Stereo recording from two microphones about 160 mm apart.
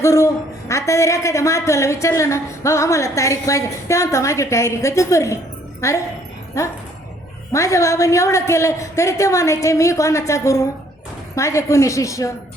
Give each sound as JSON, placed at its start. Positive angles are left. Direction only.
{"t": 0.0, "sound": "a woman's voice", "side_deg": 20}